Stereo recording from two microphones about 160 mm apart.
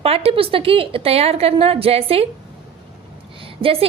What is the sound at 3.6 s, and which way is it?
Speech, 35° right (ahead or behind).